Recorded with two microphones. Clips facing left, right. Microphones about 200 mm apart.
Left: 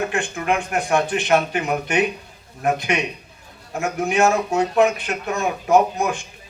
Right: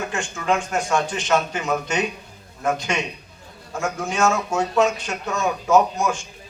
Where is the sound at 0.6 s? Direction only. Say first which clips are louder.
Left 2 dB; 60° left (ahead or behind).